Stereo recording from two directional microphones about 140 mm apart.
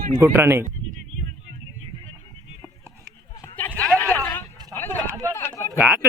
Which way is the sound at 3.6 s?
10° left (ahead or behind).